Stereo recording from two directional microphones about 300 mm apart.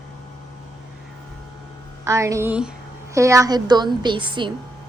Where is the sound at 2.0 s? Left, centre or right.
Centre.